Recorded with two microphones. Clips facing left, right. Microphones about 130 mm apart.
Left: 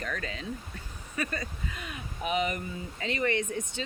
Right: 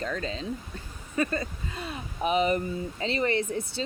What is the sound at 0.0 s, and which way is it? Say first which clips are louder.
Speech: right 4 dB; 25° right (ahead or behind).